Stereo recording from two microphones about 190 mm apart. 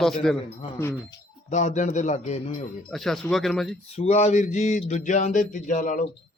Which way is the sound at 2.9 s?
Centre (ahead or behind).